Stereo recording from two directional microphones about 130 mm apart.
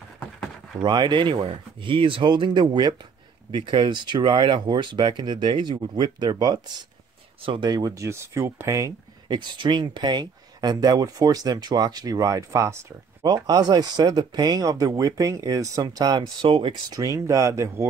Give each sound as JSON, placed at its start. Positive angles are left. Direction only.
{"t": 0.8, "sound": "speech", "side_deg": -35}
{"t": 16.9, "sound": "speech", "side_deg": -25}